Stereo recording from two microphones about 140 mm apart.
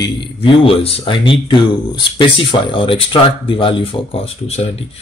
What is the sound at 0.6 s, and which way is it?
Speech, 40° left (ahead or behind).